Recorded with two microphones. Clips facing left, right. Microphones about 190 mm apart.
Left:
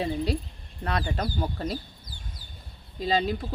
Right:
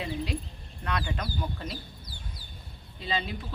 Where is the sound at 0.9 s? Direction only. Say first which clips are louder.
Left 4 dB; 40° left (ahead or behind).